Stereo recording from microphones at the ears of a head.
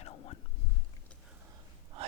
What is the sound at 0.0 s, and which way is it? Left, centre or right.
Whispering, left.